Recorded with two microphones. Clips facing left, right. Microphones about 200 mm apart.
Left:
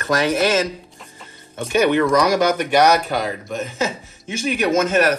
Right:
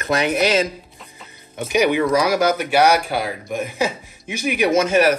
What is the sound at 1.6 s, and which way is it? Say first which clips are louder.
Speech: left 1 dB; 10° right (ahead or behind).